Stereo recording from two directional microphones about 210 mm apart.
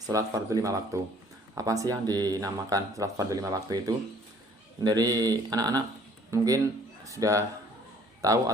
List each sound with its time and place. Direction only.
0.1 s speech: 15° right (ahead or behind)